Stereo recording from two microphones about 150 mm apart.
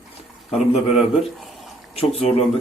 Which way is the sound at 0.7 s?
45° left (ahead or behind).